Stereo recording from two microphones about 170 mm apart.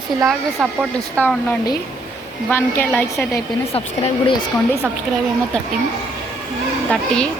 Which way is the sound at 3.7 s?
35° left (ahead or behind).